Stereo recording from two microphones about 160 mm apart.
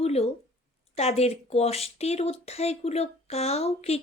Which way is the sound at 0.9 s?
40° left (ahead or behind).